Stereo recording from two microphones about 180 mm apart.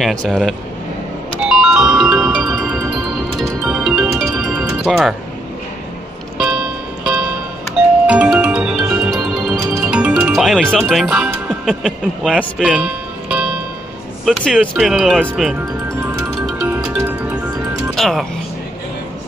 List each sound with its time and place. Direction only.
0.0 s speech: 5° left (ahead or behind)
1.5 s music: 5° right (ahead or behind)
6.3 s music: 5° right (ahead or behind)
14.2 s speech: centre (ahead or behind)
16.3 s music: 5° right (ahead or behind)
17.9 s speech: centre (ahead or behind)